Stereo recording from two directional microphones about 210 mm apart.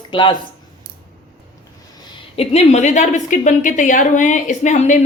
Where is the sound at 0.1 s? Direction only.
25° left (ahead or behind).